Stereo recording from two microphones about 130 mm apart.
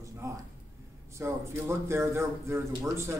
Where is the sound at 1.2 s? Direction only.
20° right (ahead or behind).